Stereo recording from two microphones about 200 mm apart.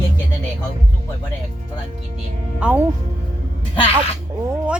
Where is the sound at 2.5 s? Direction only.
5° right (ahead or behind).